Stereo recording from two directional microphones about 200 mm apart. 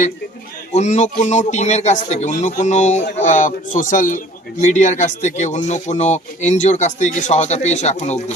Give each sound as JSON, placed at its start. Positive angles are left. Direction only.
{"t": 0.7, "sound": "speech", "side_deg": 35}